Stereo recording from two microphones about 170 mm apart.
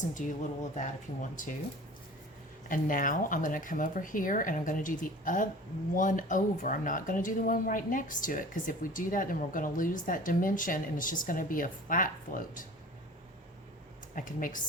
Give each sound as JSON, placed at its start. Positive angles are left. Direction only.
{"t": 0.0, "sound": "speech", "side_deg": 50}
{"t": 2.6, "sound": "speech", "side_deg": 55}
{"t": 14.2, "sound": "speech", "side_deg": 50}